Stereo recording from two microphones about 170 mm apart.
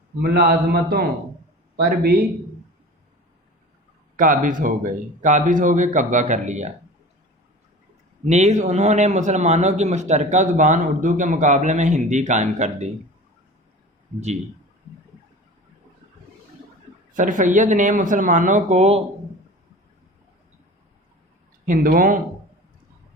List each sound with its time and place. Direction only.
0.2 s a man's voice: 65° right (ahead or behind)
4.2 s a man's voice: 50° right (ahead or behind)
8.3 s a man's voice: 40° right (ahead or behind)
17.2 s a man's voice: 50° right (ahead or behind)
21.7 s a man's voice: 55° right (ahead or behind)